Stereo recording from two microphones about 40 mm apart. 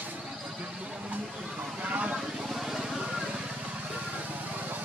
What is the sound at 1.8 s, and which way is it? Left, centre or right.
Vehicle, right.